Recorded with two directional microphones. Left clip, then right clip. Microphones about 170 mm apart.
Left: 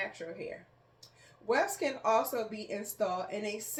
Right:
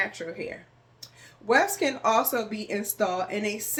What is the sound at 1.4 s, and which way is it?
Speech, 20° right (ahead or behind).